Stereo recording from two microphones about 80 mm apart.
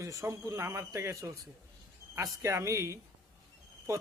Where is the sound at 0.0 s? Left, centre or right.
Right.